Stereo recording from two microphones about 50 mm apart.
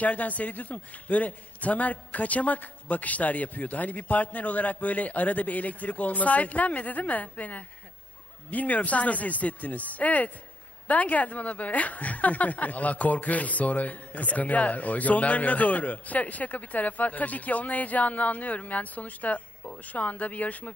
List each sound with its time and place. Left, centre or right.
0.0 s a woman's voice: left